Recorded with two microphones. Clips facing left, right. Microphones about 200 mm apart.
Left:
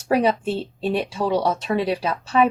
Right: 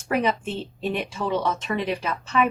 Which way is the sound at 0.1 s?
35° left (ahead or behind).